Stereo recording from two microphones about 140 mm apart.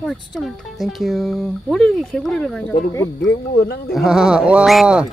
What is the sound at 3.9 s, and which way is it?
Speech, centre (ahead or behind).